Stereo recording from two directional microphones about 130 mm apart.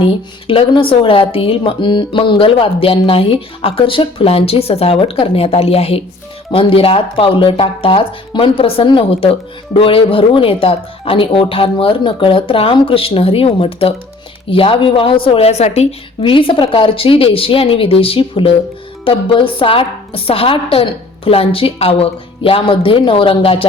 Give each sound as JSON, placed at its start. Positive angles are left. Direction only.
{"t": 0.0, "sound": "speech", "side_deg": 45}
{"t": 16.2, "sound": "speech", "side_deg": 40}